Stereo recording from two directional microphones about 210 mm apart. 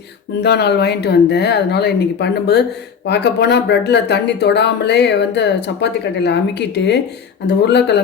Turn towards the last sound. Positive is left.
turn(degrees=55)  # may be behind; listen again after turning